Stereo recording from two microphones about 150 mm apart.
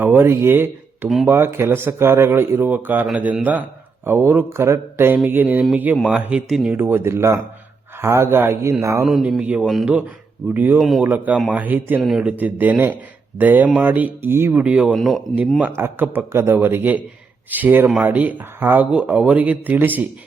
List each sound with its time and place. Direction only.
0.0 s speech: 15° right (ahead or behind)
6.7 s speech: 15° right (ahead or behind)
9.0 s speech: centre (ahead or behind)